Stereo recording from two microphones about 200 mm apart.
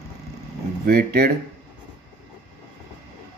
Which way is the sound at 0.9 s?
50° right (ahead or behind).